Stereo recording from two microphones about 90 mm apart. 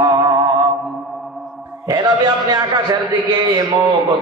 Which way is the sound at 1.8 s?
50° right (ahead or behind).